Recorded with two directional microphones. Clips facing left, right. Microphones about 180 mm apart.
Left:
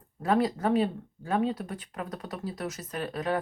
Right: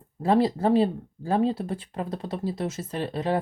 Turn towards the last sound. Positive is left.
turn(degrees=-30)  # may be behind; listen again after turning